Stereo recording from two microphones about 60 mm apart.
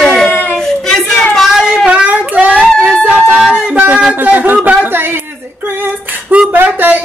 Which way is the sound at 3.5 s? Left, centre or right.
Right.